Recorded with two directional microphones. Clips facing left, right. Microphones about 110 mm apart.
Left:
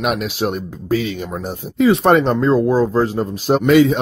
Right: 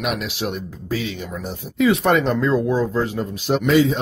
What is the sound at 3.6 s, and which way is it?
Speech, 60° left (ahead or behind).